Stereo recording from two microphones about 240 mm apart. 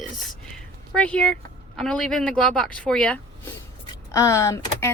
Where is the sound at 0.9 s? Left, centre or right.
Centre.